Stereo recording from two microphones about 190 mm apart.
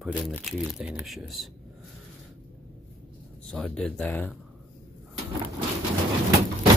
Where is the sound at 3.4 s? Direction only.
5° left (ahead or behind).